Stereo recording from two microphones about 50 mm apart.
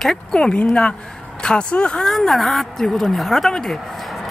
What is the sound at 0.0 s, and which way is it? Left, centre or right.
Speech, centre.